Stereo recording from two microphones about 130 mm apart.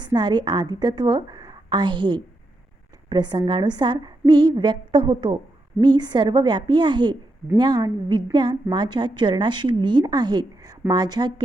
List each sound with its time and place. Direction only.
0.0 s a woman's voice: 35° right (ahead or behind)